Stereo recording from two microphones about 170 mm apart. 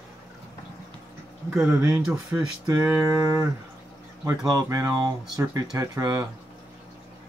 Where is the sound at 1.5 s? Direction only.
5° right (ahead or behind).